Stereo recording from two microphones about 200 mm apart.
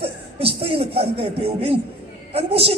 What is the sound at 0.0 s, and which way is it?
A man's voice, 30° right (ahead or behind).